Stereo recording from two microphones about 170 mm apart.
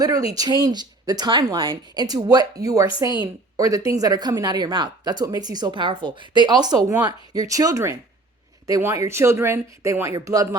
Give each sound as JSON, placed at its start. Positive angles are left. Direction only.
{"t": 0.3, "sound": "speech", "side_deg": -25}